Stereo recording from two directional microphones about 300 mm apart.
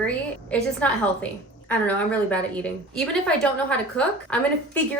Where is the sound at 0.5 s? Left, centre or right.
Centre.